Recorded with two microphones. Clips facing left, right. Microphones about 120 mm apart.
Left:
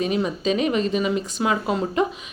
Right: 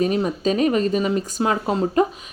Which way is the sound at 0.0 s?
40° right (ahead or behind).